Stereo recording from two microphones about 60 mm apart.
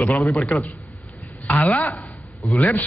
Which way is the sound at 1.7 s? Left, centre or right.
Left.